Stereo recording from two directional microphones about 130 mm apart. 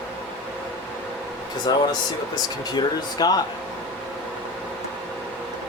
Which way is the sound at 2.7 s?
30° left (ahead or behind).